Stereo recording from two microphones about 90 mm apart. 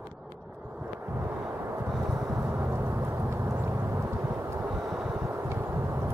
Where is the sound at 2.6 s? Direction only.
25° right (ahead or behind).